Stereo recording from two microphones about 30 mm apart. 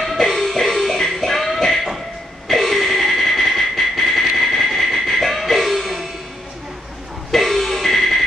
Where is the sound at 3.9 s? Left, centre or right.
Centre.